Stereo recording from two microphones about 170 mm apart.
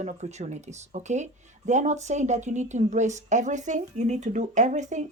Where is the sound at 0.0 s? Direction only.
40° right (ahead or behind).